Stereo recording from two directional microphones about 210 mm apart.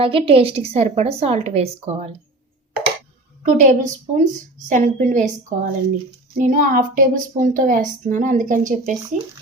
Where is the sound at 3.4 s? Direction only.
35° right (ahead or behind).